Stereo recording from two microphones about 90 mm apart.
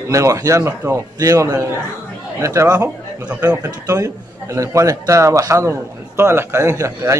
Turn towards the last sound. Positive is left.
turn(degrees=-35)  # may be behind; listen again after turning